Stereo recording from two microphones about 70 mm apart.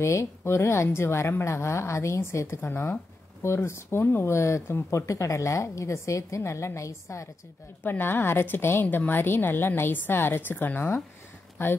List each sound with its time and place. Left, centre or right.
0.0 s a woman's voice: left
2.6 s a woman's voice: left
7.8 s a woman's voice: left